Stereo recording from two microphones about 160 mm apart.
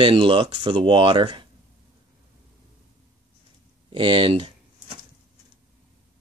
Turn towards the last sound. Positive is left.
turn(degrees=-30)  # may be behind; listen again after turning